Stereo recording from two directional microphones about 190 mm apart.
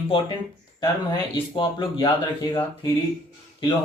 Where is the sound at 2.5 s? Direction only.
15° left (ahead or behind).